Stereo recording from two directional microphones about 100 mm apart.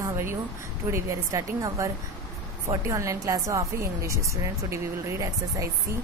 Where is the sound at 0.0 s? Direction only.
25° right (ahead or behind).